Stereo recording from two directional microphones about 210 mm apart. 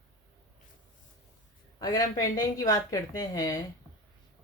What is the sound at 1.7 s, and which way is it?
Speech, 15° left (ahead or behind).